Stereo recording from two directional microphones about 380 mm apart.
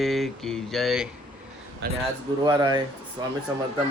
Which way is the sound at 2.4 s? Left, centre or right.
Centre.